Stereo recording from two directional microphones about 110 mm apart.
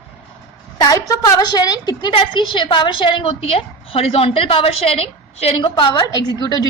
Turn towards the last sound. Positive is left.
turn(degrees=40)  # may be behind; listen again after turning